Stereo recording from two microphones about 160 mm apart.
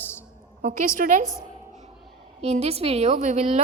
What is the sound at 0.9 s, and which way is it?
Speech, 55° right (ahead or behind).